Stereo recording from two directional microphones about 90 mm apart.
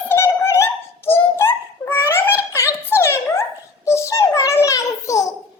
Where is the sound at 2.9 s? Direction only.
25° left (ahead or behind).